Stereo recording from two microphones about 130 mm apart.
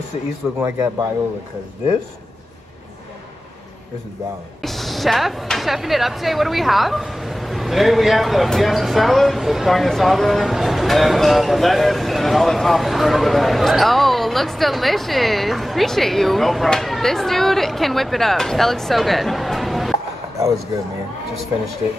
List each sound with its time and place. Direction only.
0.6 s a man's voice: 20° right (ahead or behind)
4.6 s speech: centre (ahead or behind)
20.3 s speech: 25° right (ahead or behind)